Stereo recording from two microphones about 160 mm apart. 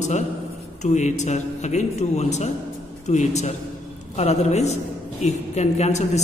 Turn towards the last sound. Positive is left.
turn(degrees=45)  # may be behind; listen again after turning